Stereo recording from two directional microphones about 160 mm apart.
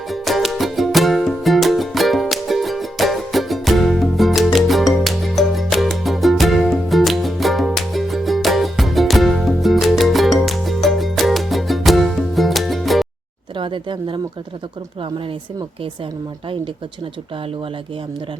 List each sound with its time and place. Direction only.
0.1 s music: centre (ahead or behind)
13.6 s speech: 30° right (ahead or behind)